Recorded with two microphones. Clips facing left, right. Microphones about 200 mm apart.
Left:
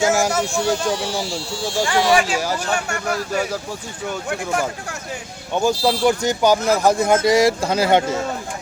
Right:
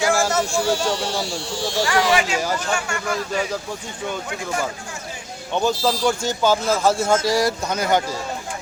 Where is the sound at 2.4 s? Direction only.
10° left (ahead or behind).